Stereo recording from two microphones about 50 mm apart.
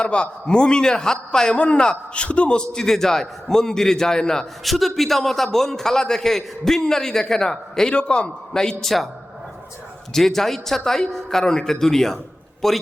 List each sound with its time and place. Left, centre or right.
0.0 s a man's voice: centre
2.7 s a man's voice: centre
4.6 s a man's voice: centre
7.9 s a man's voice: left
8.8 s a man's voice: centre
10.1 s a man's voice: centre